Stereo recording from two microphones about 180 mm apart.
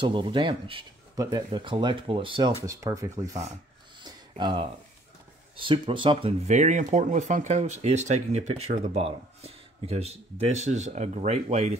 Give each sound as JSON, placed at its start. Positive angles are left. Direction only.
{"t": 0.0, "sound": "speech", "side_deg": -25}
{"t": 2.6, "sound": "speech", "side_deg": -15}
{"t": 4.0, "sound": "a sound", "side_deg": -25}
{"t": 5.6, "sound": "speech", "side_deg": -30}